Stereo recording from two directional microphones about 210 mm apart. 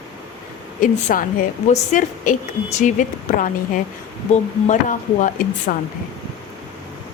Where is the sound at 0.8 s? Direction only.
40° left (ahead or behind).